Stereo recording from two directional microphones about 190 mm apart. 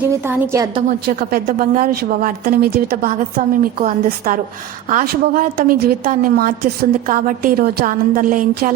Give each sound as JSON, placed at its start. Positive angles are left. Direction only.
{"t": 0.3, "sound": "a woman's voice", "side_deg": -15}
{"t": 0.9, "sound": "a woman's voice", "side_deg": -50}